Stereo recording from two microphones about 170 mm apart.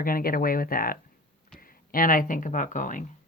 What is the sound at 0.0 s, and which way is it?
Speech, 60° left (ahead or behind).